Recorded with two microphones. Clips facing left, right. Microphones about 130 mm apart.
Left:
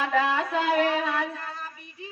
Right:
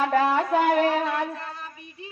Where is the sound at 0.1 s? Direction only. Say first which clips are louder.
Right 4 dB; 45° right (ahead or behind).